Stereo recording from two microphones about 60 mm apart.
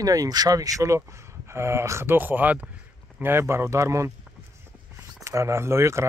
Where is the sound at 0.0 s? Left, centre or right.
Right.